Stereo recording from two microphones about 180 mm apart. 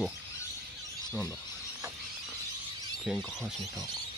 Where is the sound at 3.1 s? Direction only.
5° right (ahead or behind).